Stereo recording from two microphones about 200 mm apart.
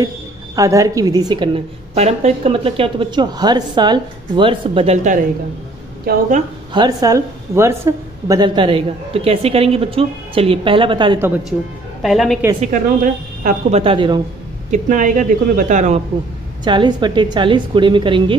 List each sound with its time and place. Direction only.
0.6 s a woman's voice: 15° right (ahead or behind); by 5.2 s 35° right (ahead or behind)
6.1 s speech: 50° right (ahead or behind)
6.7 s a woman's voice: 20° right (ahead or behind)
11.1 s a woman's voice: 10° right (ahead or behind)
12.7 s a woman's voice: 40° right (ahead or behind); by 14.2 s 25° right (ahead or behind)
14.7 s a woman's voice: 40° right (ahead or behind)
16.6 s a woman's voice: 20° right (ahead or behind)